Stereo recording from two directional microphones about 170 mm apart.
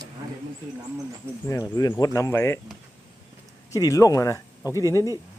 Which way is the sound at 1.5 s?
20° left (ahead or behind).